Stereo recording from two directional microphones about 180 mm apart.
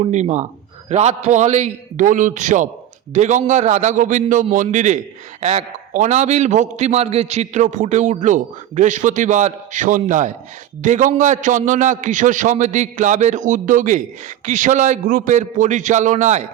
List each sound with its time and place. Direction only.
0.0 s a man's voice: 40° right (ahead or behind)